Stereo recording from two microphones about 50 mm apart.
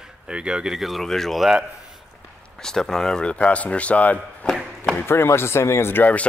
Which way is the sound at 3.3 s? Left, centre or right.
Left.